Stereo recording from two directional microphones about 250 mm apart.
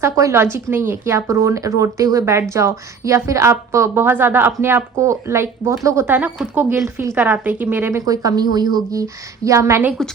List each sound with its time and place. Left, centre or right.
0.0 s speech: centre